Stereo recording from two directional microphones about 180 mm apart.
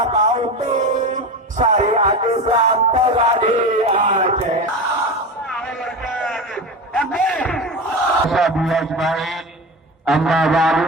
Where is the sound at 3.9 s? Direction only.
45° right (ahead or behind).